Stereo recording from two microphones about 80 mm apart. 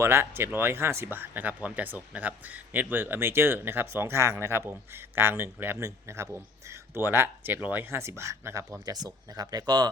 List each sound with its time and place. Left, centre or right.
0.0 s speech: right
8.9 s speech: right